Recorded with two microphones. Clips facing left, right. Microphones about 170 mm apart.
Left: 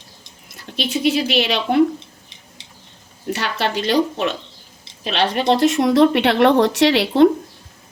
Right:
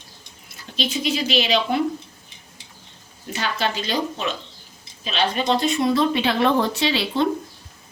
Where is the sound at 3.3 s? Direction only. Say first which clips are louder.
Left 2 dB; 70° left (ahead or behind).